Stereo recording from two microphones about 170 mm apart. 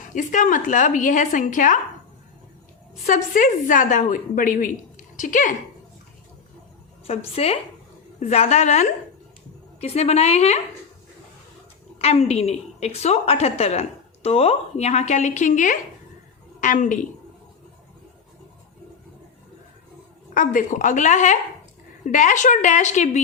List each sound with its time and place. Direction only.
0.1 s a woman's voice: 50° left (ahead or behind)
3.1 s a woman's voice: 50° left (ahead or behind)
7.1 s a woman's voice: 35° left (ahead or behind)
11.9 s a woman's voice: 35° left (ahead or behind)
20.3 s a woman's voice: 50° left (ahead or behind)